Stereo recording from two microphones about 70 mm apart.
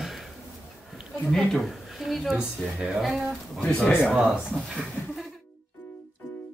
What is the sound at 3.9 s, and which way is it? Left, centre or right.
Speech, left.